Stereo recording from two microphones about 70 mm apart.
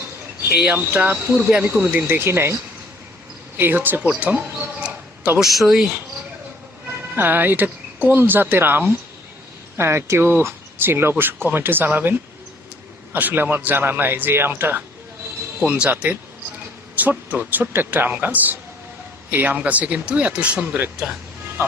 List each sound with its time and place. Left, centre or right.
0.5 s speech: centre
0.9 s speech: right
3.6 s speech: right
4.5 s a sound: centre
5.4 s speech: centre
7.2 s speech: right
13.1 s speech: right